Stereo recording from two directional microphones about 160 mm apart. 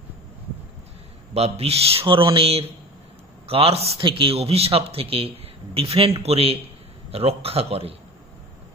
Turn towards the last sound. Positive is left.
turn(degrees=-40)  # may be behind; listen again after turning